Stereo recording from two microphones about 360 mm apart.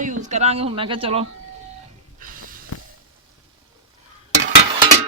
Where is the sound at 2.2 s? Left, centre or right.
Right.